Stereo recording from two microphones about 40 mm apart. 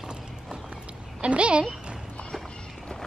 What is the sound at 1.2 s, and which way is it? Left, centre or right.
Speech, right.